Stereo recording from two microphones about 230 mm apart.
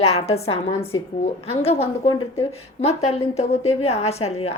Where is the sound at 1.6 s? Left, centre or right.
Left.